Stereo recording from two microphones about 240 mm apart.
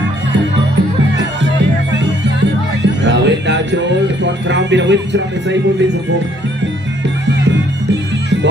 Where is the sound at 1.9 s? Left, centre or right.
Right.